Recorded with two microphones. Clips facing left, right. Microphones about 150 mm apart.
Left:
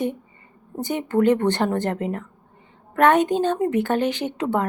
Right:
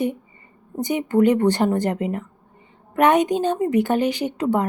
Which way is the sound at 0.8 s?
15° right (ahead or behind).